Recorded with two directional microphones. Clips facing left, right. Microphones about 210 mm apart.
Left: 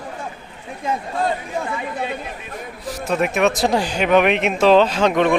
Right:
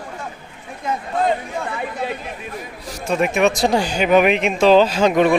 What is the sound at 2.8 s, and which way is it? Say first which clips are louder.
Speech: right 1 dB; 5° left (ahead or behind).